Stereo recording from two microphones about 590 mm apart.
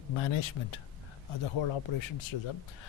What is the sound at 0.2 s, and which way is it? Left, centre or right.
Speech, left.